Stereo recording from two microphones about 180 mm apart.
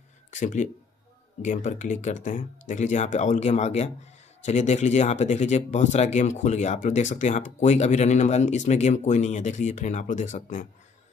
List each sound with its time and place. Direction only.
0.3 s speech: 45° left (ahead or behind)